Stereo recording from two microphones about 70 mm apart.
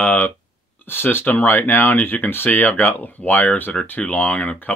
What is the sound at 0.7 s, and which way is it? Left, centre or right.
Speech, left.